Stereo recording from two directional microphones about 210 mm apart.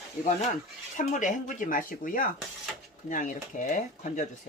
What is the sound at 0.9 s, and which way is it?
Speech, 35° left (ahead or behind).